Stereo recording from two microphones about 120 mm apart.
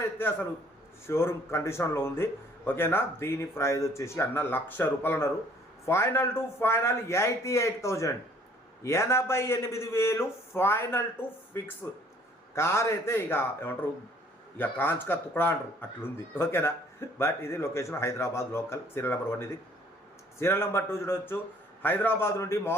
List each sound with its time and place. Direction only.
0.2 s a man's voice: 15° left (ahead or behind)